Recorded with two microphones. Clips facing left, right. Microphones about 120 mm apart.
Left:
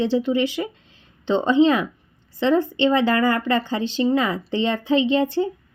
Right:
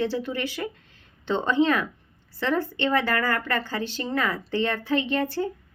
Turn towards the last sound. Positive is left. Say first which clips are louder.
# left 6 dB
turn(degrees=20)  # may be behind; listen again after turning